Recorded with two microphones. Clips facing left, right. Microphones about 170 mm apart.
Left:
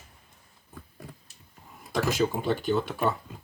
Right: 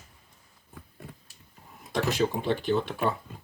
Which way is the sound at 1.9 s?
Centre (ahead or behind).